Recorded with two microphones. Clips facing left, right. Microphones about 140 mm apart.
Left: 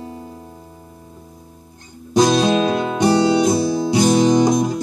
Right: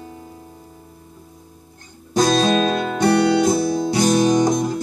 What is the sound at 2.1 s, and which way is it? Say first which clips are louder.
Music: left 2 dB; 15° left (ahead or behind).